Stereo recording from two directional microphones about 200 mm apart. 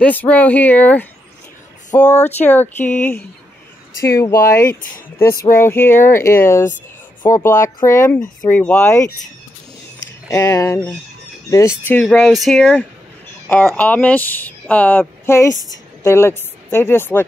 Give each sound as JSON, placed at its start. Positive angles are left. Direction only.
{"t": 0.0, "sound": "speech", "side_deg": 10}
{"t": 4.0, "sound": "speech", "side_deg": 15}
{"t": 10.2, "sound": "speech", "side_deg": 15}